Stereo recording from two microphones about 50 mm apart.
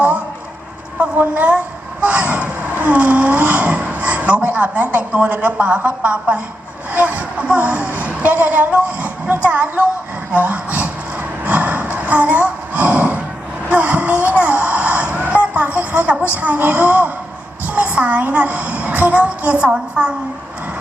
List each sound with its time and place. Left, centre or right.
0.9 s a woman's voice: right
10.3 s a sound: right
16.2 s a woman's voice: right